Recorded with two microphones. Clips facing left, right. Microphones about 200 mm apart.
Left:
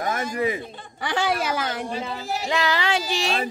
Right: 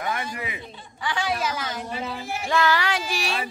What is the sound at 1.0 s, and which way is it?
Speech, 65° left (ahead or behind).